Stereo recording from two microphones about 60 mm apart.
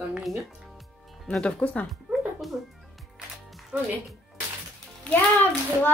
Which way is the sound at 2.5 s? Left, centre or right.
Centre.